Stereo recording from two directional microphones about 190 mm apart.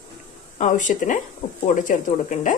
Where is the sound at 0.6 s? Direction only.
40° left (ahead or behind).